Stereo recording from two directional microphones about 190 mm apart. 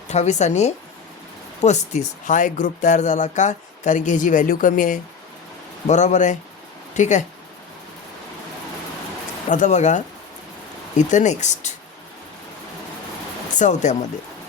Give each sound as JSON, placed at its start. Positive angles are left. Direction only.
{"t": 0.1, "sound": "speech", "side_deg": 35}
{"t": 9.5, "sound": "speech", "side_deg": 40}
{"t": 13.6, "sound": "speech", "side_deg": 40}